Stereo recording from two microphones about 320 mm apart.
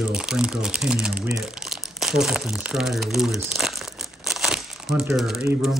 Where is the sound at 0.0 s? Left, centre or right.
Centre.